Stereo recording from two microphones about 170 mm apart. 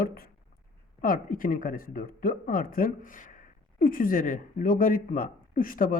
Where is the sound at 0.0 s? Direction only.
60° left (ahead or behind).